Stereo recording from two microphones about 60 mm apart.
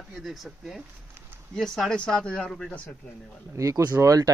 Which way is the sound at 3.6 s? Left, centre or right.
Right.